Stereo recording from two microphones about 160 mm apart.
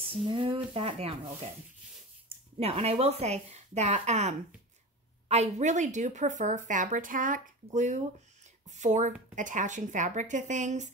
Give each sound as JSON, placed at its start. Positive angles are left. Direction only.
{"t": 0.0, "sound": "a woman's voice", "side_deg": -35}